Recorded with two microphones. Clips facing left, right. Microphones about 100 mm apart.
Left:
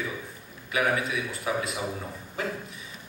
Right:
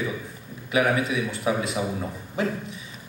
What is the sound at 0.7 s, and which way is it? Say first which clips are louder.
Speech: right 4 dB; 10° right (ahead or behind).